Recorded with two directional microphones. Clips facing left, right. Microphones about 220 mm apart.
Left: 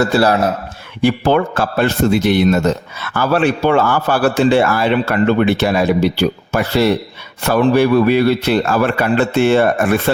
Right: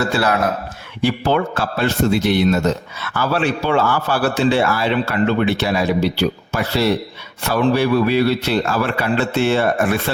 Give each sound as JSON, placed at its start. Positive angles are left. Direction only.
{"t": 0.1, "sound": "a man's voice", "side_deg": 35}
{"t": 1.0, "sound": "a man's voice", "side_deg": 50}